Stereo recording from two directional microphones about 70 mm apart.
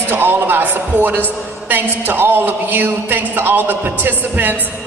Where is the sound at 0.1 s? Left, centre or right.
Right.